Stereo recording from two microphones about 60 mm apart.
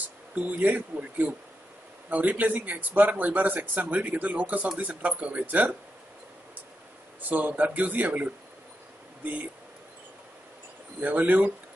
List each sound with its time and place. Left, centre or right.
0.3 s speech: right
7.2 s speech: right
11.0 s speech: right